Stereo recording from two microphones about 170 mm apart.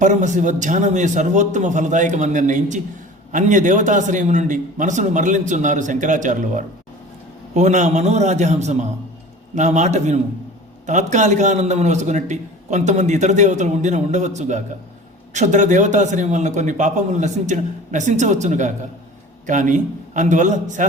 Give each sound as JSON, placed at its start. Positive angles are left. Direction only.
{"t": 0.0, "sound": "a man's voice", "side_deg": -45}